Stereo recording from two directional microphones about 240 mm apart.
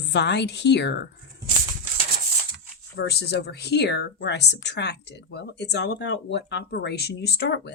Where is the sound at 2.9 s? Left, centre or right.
Left.